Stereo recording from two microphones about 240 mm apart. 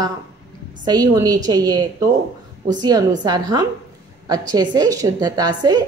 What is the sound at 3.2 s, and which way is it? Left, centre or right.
A woman's voice, centre.